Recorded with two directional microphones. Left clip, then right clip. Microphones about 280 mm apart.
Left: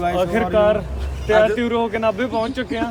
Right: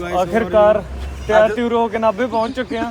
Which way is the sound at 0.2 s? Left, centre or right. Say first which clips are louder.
Right 5 dB; centre.